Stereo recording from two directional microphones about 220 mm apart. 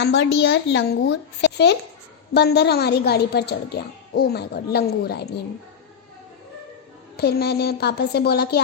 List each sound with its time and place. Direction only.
0.0 s a woman's voice: 55° left (ahead or behind)
7.2 s a woman's voice: 45° left (ahead or behind)